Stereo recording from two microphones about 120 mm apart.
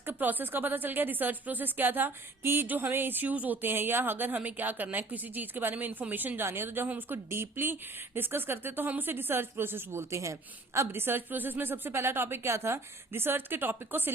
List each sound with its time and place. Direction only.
0.0 s a woman's voice: 15° right (ahead or behind)